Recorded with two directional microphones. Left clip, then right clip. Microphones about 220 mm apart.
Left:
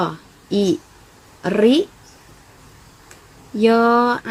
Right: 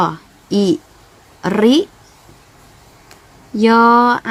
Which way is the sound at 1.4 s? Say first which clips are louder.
Right 2 dB; 25° right (ahead or behind).